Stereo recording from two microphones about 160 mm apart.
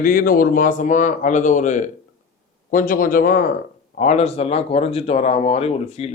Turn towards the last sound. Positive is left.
turn(degrees=40)  # may be behind; listen again after turning